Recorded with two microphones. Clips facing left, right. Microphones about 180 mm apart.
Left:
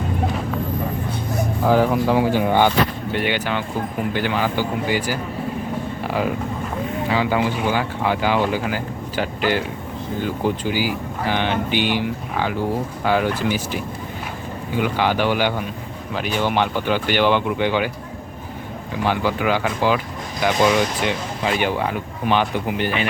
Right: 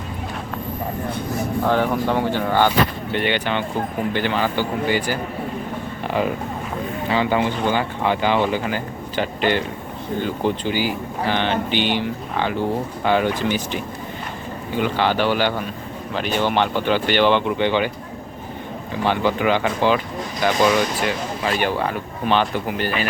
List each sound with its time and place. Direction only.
1.6 s speech: 5° left (ahead or behind)
7.1 s speech: 5° left (ahead or behind)
19.0 s speech: 10° left (ahead or behind)